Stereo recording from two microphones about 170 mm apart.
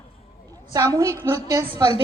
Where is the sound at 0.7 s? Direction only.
20° right (ahead or behind).